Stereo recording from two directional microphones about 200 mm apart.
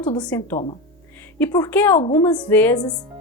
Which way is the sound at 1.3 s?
15° left (ahead or behind).